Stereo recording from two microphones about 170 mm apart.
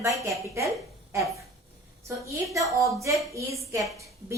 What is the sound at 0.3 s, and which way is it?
Speech, 20° right (ahead or behind).